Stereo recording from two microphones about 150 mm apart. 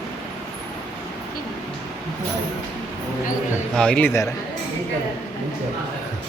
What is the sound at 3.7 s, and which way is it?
Speech, 5° left (ahead or behind).